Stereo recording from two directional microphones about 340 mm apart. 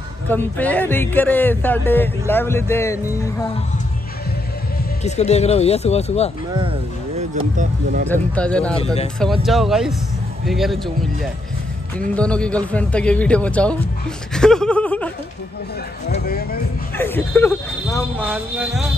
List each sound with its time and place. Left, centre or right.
0.3 s speech: centre
5.0 s speech: centre
6.5 s speech: centre
8.1 s speech: centre
8.7 s speech: centre
9.2 s speech: centre
12.1 s speech: centre
16.1 s speech: left
16.9 s speech: centre